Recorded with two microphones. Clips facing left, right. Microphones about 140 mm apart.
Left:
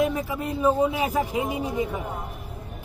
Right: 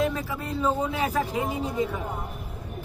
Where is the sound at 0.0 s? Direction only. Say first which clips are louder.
Left 3 dB; 15° left (ahead or behind).